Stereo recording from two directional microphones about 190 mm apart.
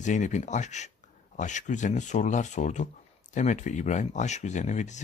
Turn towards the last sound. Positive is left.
turn(degrees=40)  # may be behind; listen again after turning